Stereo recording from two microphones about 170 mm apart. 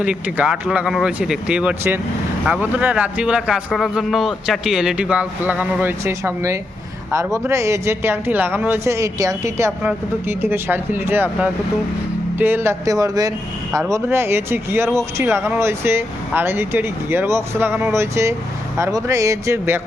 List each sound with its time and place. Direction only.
0.0 s a man's voice: 5° right (ahead or behind)